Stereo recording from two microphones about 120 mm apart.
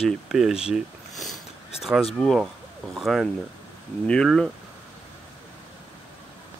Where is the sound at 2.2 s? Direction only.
Centre (ahead or behind).